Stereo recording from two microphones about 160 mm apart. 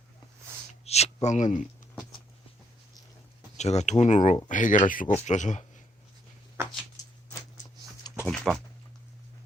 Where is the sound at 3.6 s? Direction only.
45° left (ahead or behind).